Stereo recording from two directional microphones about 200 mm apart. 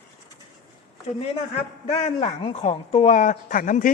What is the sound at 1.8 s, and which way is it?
Speech, 30° left (ahead or behind).